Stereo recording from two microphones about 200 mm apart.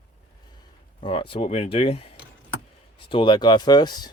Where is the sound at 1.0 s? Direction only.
25° left (ahead or behind).